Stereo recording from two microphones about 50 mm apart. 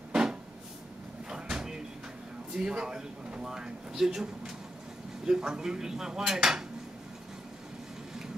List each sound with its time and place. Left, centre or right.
0.1 s cupboard open or close: centre
1.3 s vehicle: centre
2.5 s speech: centre
5.2 s dishes: centre